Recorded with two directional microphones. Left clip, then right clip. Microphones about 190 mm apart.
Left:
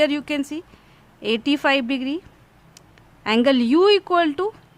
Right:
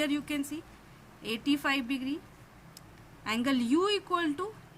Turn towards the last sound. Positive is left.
turn(degrees=55)  # may be behind; listen again after turning